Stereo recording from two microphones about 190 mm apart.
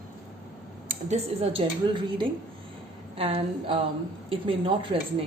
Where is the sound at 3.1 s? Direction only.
30° right (ahead or behind).